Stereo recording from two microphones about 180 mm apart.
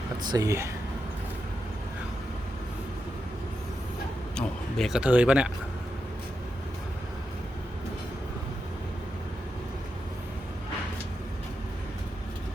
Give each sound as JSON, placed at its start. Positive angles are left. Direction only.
{"t": 0.2, "sound": "speech", "side_deg": -20}
{"t": 4.4, "sound": "speech", "side_deg": 0}